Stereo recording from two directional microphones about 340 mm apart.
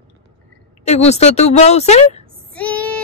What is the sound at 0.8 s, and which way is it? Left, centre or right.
A woman's voice, centre.